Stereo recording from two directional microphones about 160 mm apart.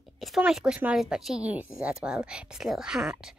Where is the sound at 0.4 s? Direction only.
5° right (ahead or behind).